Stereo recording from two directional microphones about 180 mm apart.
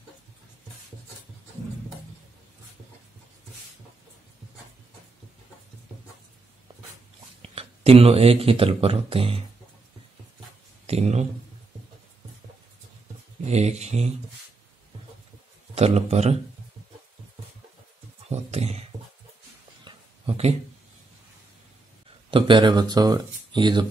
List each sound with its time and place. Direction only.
7.4 s speech: 35° right (ahead or behind)
10.9 s speech: 35° right (ahead or behind)
13.5 s a man's voice: 40° right (ahead or behind)
15.7 s a man's voice: 35° right (ahead or behind)
18.3 s a sound: 35° right (ahead or behind)
22.3 s speech: 25° right (ahead or behind)